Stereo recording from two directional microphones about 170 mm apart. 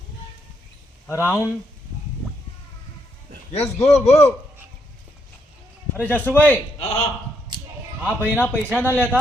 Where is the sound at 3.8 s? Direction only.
40° left (ahead or behind).